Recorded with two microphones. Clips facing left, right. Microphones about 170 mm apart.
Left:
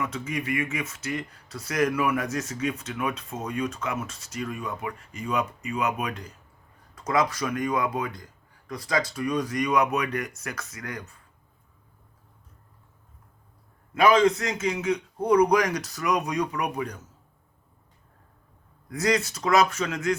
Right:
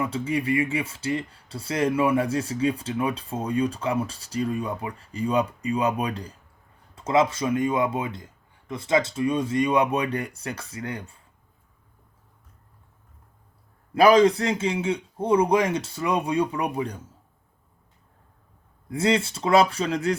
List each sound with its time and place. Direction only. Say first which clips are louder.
0.0 s speech: right 5 dB; 30° right (ahead or behind)
13.9 s speech: right 3 dB; 35° right (ahead or behind)
18.9 s speech: right 2 dB; 25° right (ahead or behind)